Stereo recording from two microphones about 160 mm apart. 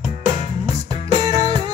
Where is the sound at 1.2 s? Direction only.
25° right (ahead or behind).